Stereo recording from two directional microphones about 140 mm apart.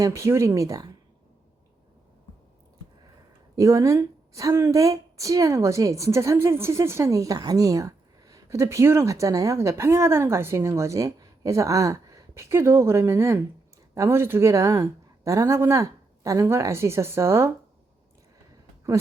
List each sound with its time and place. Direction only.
0.0 s a woman's voice: 20° right (ahead or behind)
3.5 s a woman's voice: 20° right (ahead or behind)